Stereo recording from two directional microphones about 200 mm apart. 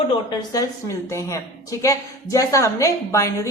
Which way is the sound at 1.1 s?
15° left (ahead or behind).